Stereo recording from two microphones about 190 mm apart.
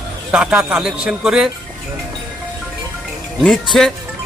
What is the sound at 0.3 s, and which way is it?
A man's voice, 5° right (ahead or behind).